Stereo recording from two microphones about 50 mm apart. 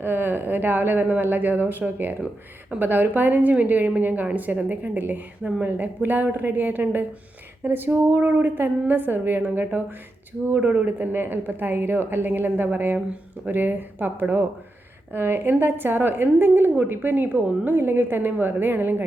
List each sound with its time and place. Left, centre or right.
0.0 s a woman's voice: right
11.1 s a woman's voice: right